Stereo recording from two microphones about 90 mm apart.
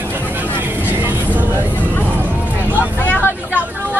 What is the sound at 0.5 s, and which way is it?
Vehicle, 25° right (ahead or behind).